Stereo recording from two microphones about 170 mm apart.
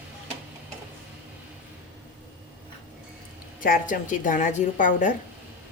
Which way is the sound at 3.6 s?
55° left (ahead or behind).